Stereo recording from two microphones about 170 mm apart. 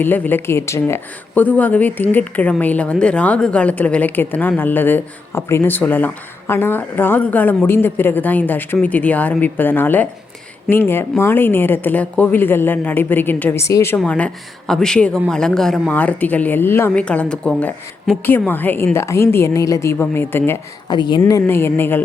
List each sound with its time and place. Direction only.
0.0 s a woman's voice: 10° left (ahead or behind)
20.9 s speech: 25° left (ahead or behind)